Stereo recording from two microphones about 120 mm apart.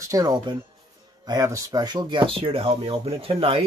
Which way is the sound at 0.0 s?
30° right (ahead or behind).